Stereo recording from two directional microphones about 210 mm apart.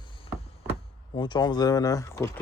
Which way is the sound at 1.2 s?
20° left (ahead or behind).